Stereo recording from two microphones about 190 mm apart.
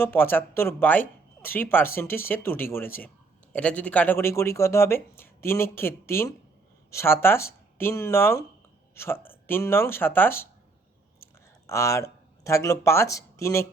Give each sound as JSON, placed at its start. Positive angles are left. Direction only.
{"t": 0.0, "sound": "speech", "side_deg": 10}
{"t": 11.2, "sound": "a sound", "side_deg": 15}
{"t": 12.4, "sound": "speech", "side_deg": 15}